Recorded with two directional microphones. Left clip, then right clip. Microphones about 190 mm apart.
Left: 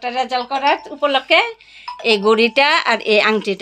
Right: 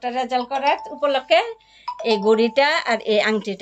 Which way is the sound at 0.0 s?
20° left (ahead or behind).